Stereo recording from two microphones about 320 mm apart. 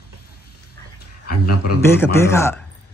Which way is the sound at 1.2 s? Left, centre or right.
Left.